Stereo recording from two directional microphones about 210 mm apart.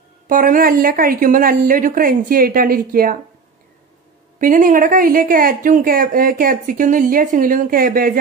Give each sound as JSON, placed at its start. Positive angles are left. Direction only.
{"t": 0.3, "sound": "a woman's voice", "side_deg": -40}
{"t": 4.4, "sound": "speech", "side_deg": -40}